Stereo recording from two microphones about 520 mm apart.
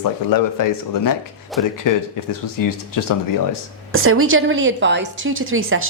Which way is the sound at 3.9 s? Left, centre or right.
Right.